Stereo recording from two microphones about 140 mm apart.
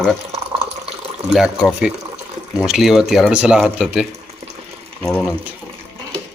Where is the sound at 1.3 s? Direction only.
5° right (ahead or behind).